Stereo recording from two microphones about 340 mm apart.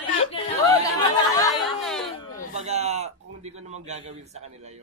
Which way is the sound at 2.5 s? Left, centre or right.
Centre.